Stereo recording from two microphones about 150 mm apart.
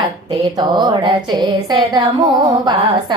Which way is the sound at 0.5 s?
30° right (ahead or behind).